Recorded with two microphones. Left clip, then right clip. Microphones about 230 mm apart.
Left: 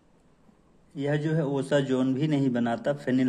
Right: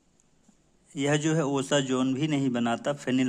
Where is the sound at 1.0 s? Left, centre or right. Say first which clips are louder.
Right 2 dB; right.